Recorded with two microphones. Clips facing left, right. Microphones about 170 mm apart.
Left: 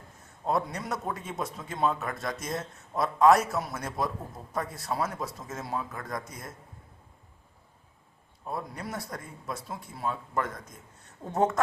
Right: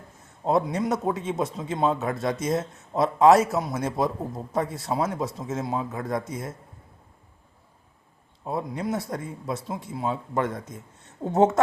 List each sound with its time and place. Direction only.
0.4 s a man's voice: 25° right (ahead or behind)
8.8 s speech: 20° right (ahead or behind)